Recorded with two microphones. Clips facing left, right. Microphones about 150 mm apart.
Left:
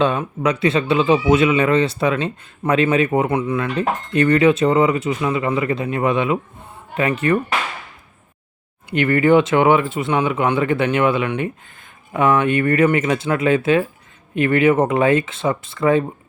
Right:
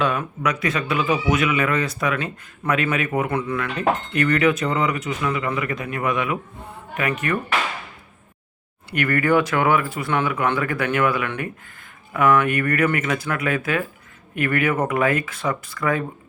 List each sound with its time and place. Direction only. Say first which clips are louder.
0.0 s speech: left 4 dB; 30° left (ahead or behind)
8.9 s speech: left 5 dB; 25° left (ahead or behind)